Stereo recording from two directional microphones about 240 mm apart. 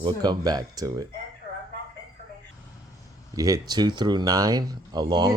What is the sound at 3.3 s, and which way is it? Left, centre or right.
Speech, centre.